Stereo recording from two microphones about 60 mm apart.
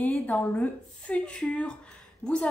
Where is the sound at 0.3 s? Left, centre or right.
Left.